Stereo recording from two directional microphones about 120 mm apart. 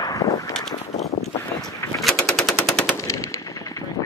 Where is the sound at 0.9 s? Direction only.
65° left (ahead or behind).